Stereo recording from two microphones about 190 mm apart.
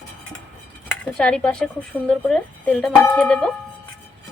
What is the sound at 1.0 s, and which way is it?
Speech, 5° left (ahead or behind).